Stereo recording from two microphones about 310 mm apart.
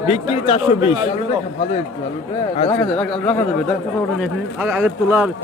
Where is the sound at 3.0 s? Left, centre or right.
Centre.